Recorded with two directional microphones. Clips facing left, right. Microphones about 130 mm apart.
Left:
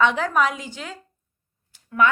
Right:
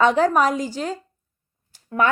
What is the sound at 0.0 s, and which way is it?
A woman's voice, 40° right (ahead or behind).